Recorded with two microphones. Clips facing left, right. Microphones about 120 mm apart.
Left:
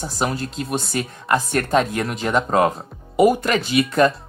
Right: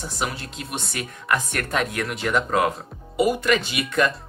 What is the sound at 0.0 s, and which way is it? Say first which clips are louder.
Speech: left 5 dB; 40° left (ahead or behind).